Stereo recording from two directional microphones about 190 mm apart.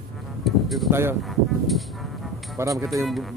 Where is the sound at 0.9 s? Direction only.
10° right (ahead or behind).